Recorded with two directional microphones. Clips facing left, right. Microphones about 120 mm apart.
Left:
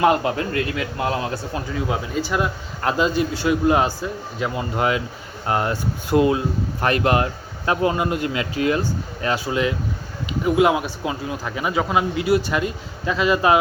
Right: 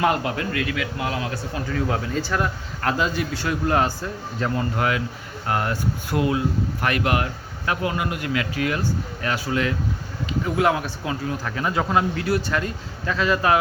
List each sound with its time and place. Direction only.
0.0 s a man's voice: 25° left (ahead or behind)
1.7 s a man's voice: 15° left (ahead or behind)
4.7 s a man's voice: 20° left (ahead or behind)